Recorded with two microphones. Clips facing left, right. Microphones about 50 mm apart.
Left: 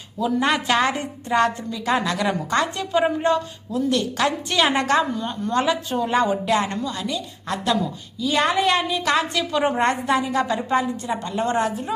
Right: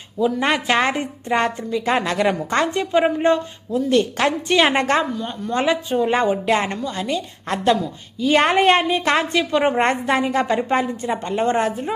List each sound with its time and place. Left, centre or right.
0.4 s a woman's voice: right
5.6 s a woman's voice: right